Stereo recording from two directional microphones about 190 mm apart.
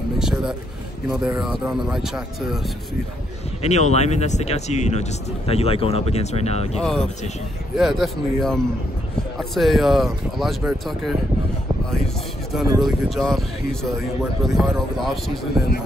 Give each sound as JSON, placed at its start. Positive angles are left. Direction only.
{"t": 0.2, "sound": "a sound", "side_deg": -5}
{"t": 1.2, "sound": "speech", "side_deg": 0}
{"t": 3.6, "sound": "speech", "side_deg": 35}
{"t": 6.8, "sound": "speech", "side_deg": 5}
{"t": 12.8, "sound": "speech", "side_deg": 0}